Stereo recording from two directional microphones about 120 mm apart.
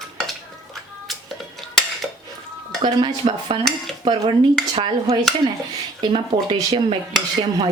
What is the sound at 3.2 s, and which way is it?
Speech, 50° right (ahead or behind).